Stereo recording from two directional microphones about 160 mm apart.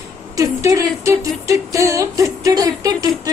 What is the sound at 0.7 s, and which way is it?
Music, 20° right (ahead or behind).